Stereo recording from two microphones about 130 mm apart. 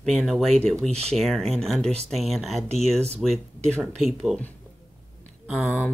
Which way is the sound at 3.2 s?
Centre (ahead or behind).